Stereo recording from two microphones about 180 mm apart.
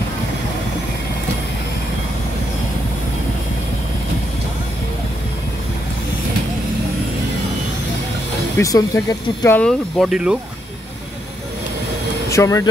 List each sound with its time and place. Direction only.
8.5 s speech: 15° left (ahead or behind); by 10.3 s 5° right (ahead or behind)
12.3 s speech: 15° left (ahead or behind)